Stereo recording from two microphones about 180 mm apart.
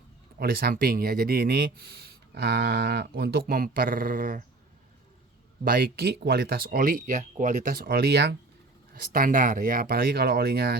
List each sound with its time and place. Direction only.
0.3 s speech: 55° right (ahead or behind)
5.6 s speech: 55° right (ahead or behind)
8.9 s speech: 50° right (ahead or behind)